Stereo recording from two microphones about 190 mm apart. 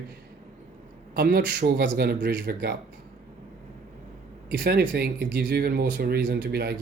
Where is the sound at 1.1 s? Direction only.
55° right (ahead or behind).